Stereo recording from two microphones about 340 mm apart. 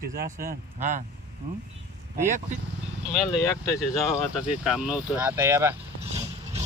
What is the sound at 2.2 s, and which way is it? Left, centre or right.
Speech, right.